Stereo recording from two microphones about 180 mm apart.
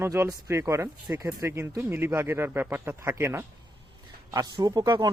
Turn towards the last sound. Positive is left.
turn(degrees=-20)  # may be behind; listen again after turning